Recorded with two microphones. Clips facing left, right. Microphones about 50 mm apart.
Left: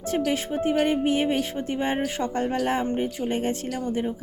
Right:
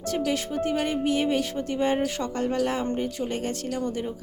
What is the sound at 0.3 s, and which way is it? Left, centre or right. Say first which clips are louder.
A woman's voice: left 1 dB; left.